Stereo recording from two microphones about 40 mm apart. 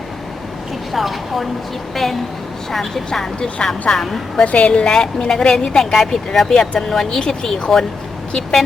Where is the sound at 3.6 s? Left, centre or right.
Left.